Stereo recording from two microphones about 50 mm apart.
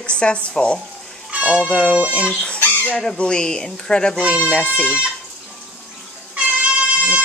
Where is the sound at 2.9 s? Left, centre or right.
Centre.